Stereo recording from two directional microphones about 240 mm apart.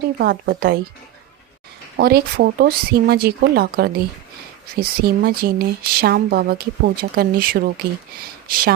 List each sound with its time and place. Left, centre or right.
0.2 s speech: right
2.0 s speech: right